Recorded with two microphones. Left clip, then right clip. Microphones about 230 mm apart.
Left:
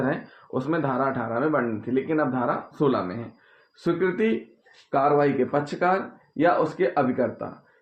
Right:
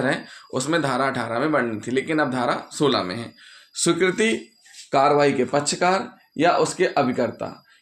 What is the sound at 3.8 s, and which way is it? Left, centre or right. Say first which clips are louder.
Speech: right 4 dB; right.